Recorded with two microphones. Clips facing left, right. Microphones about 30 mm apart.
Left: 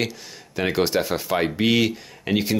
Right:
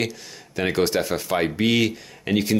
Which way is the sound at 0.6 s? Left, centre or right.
Centre.